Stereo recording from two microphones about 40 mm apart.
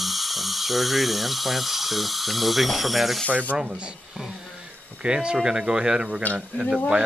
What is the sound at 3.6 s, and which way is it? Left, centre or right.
Speech, right.